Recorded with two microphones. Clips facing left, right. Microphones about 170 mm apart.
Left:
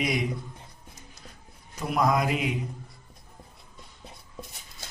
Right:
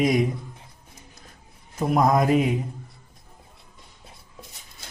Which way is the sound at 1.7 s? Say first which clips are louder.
Right 5 dB; 45° right (ahead or behind).